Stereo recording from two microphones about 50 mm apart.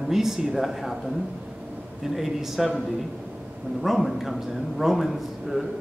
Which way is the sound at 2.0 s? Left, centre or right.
Centre.